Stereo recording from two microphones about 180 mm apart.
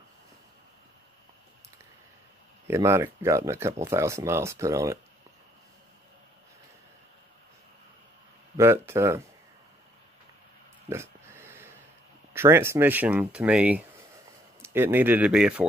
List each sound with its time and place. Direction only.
2.7 s speech: 15° right (ahead or behind)
8.5 s speech: 15° right (ahead or behind)
10.9 s a sound: 15° right (ahead or behind)
12.4 s speech: 15° right (ahead or behind)